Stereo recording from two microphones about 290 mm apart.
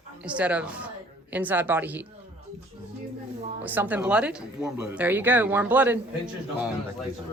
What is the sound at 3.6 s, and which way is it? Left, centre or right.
Speech, centre.